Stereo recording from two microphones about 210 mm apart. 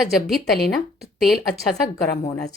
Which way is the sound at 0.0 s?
Centre (ahead or behind).